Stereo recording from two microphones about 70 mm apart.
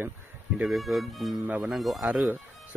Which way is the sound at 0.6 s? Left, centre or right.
Centre.